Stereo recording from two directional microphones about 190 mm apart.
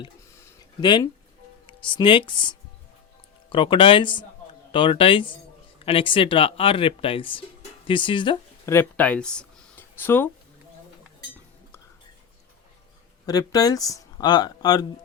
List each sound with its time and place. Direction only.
0.3 s a sound: 20° left (ahead or behind)
1.6 s speech: 25° left (ahead or behind)
8.6 s speech: 10° left (ahead or behind)
13.2 s speech: 20° left (ahead or behind)